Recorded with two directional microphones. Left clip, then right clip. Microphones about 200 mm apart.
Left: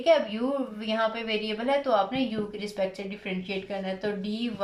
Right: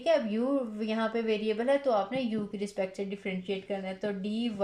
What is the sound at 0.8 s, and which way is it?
A woman's voice, 30° right (ahead or behind).